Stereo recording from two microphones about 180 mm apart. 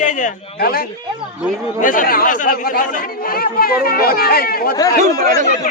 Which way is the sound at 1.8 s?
45° left (ahead or behind).